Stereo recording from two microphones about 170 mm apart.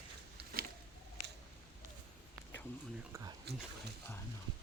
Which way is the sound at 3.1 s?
15° right (ahead or behind).